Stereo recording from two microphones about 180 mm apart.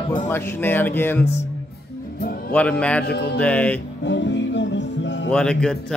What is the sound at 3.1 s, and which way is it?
Music, 65° left (ahead or behind).